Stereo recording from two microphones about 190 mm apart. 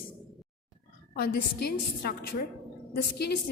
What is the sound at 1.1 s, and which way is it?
Speech, 50° left (ahead or behind).